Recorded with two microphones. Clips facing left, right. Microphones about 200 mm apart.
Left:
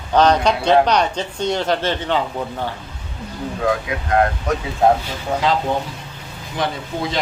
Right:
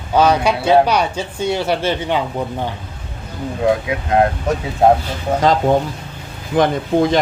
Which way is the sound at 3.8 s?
25° right (ahead or behind).